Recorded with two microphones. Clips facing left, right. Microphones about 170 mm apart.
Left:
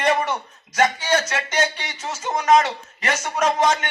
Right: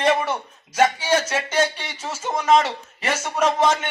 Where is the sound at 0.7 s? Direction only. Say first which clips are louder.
Right 1 dB; 5° right (ahead or behind).